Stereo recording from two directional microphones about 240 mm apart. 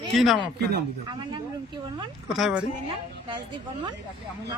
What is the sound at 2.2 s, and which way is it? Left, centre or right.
Speech, centre.